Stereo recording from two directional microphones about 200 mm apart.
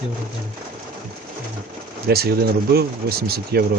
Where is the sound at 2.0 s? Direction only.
50° right (ahead or behind).